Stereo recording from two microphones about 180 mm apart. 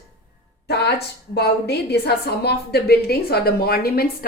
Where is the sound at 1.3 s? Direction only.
65° left (ahead or behind).